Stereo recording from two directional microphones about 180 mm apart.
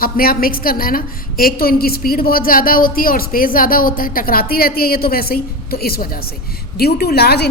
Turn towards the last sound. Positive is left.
turn(degrees=60)  # may be behind; listen again after turning